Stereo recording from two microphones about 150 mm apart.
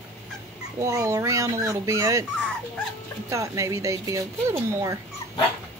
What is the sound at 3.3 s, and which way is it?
Speech, 20° right (ahead or behind).